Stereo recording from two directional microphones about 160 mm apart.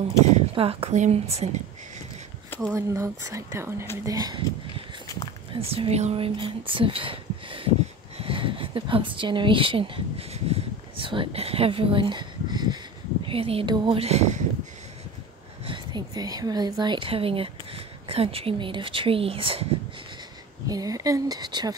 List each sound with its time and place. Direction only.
0.6 s a woman's voice: 35° right (ahead or behind)
2.7 s speech: 20° right (ahead or behind)
5.5 s speech: 35° right (ahead or behind)
8.2 s a sound: 35° right (ahead or behind)
13.3 s a woman's voice: 35° right (ahead or behind)
15.6 s a woman's voice: 30° right (ahead or behind)
20.6 s speech: 20° right (ahead or behind)